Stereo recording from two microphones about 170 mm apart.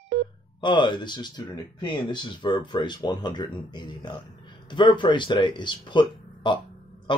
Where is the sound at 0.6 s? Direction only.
25° left (ahead or behind).